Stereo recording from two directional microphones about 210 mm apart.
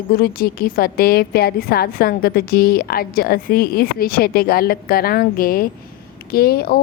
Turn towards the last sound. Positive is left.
turn(degrees=45)  # may be behind; listen again after turning